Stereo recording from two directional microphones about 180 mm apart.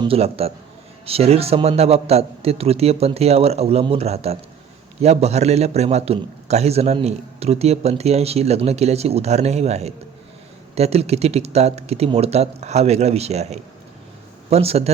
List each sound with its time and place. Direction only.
0.0 s a man's voice: 30° right (ahead or behind)